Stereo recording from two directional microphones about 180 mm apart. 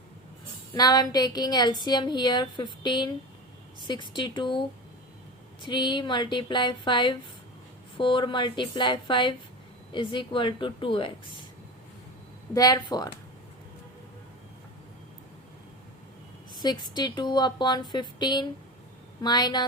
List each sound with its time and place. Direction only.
0.7 s a woman's voice: 20° left (ahead or behind)
5.6 s a woman's voice: 25° left (ahead or behind)
12.5 s a woman's voice: 20° left (ahead or behind)
16.6 s a woman's voice: 25° left (ahead or behind)